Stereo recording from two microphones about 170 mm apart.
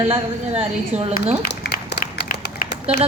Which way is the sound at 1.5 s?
75° left (ahead or behind).